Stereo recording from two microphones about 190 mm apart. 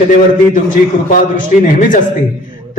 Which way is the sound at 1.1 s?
45° left (ahead or behind).